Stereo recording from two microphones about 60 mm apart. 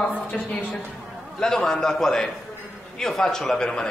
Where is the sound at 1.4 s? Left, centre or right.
Centre.